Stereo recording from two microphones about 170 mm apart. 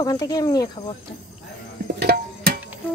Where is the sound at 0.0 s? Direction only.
20° left (ahead or behind).